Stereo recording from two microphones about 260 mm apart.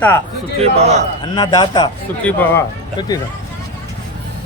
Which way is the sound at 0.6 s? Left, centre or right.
Right.